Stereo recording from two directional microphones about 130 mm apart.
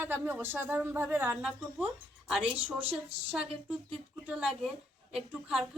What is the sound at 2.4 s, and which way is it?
Speech, 45° right (ahead or behind).